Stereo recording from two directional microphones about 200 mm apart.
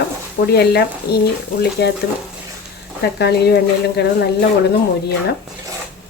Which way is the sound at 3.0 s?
55° left (ahead or behind).